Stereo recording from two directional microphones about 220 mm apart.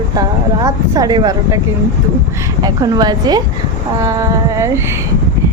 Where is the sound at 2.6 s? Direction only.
20° right (ahead or behind).